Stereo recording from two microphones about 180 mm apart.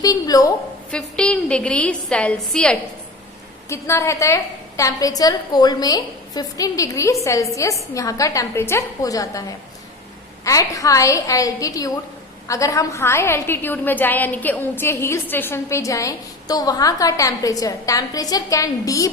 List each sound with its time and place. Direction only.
0.0 s a woman's voice: 20° left (ahead or behind)
0.9 s a woman's voice: 5° left (ahead or behind)
3.7 s a woman's voice: 15° left (ahead or behind)
10.4 s a woman's voice: 15° left (ahead or behind)